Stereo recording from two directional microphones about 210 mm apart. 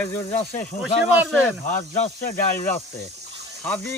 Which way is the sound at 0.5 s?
5° left (ahead or behind).